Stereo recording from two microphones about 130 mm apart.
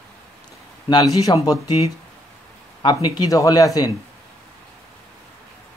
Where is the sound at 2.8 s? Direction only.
35° left (ahead or behind).